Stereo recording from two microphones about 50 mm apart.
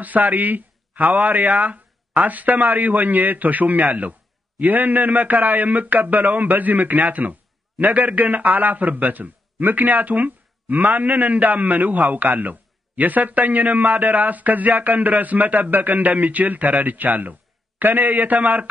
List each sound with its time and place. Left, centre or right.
0.0 s a man's voice: right